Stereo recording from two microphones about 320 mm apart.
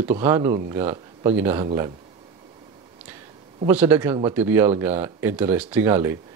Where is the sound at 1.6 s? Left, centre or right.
Centre.